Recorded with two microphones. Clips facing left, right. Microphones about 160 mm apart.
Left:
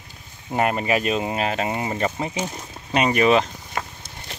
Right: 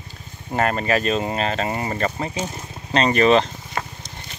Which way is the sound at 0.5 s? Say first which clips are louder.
Right 1 dB; 15° left (ahead or behind).